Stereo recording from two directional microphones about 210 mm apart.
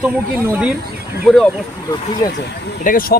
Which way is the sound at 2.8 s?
40° left (ahead or behind).